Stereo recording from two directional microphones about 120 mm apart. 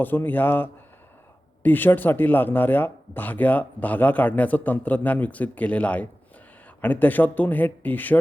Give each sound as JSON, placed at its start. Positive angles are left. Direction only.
{"t": 0.0, "sound": "speech", "side_deg": 15}